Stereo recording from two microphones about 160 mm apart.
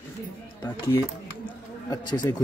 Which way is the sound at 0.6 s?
20° left (ahead or behind).